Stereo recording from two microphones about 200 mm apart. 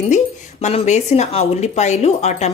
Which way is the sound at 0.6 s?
35° left (ahead or behind).